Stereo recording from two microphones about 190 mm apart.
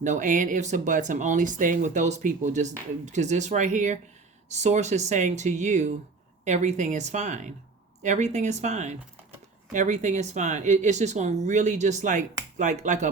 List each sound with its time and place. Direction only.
0.0 s speech: 40° right (ahead or behind)